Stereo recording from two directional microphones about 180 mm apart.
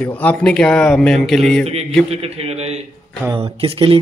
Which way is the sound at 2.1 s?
35° right (ahead or behind).